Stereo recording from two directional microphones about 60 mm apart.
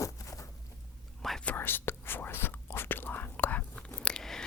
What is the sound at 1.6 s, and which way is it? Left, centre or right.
Whispering, left.